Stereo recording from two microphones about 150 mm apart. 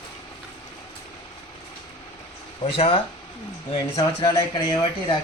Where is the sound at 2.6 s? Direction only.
40° left (ahead or behind).